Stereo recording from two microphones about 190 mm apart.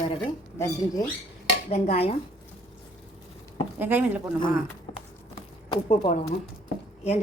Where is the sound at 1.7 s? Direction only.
35° left (ahead or behind).